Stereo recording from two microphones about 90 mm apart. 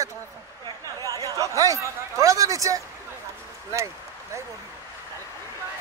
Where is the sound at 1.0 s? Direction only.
40° right (ahead or behind).